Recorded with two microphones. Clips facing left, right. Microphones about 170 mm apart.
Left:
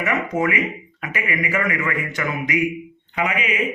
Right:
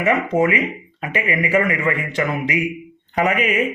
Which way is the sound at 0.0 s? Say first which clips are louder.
Right 4 dB; 30° right (ahead or behind).